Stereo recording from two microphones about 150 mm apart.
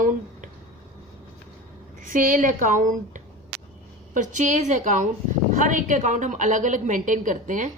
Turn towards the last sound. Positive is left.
turn(degrees=-60)  # may be behind; listen again after turning